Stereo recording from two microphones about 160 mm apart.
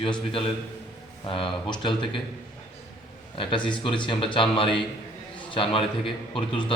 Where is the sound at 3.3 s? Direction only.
30° left (ahead or behind).